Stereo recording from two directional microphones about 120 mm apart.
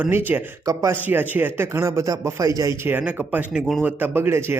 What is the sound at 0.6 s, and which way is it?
Speech, 30° right (ahead or behind).